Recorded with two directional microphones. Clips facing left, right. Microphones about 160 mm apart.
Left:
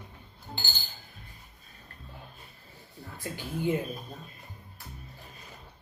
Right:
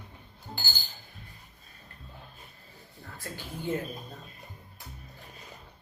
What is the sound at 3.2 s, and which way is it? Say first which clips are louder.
Speech: left 5 dB; 15° left (ahead or behind).